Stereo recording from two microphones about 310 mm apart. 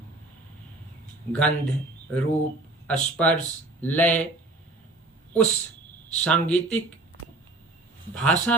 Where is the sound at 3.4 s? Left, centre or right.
Centre.